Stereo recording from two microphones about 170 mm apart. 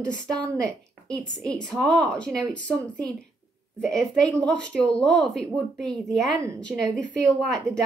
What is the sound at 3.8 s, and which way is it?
Speech, centre (ahead or behind).